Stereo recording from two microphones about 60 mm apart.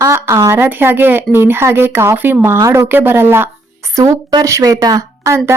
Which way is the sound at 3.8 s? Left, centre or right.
Right.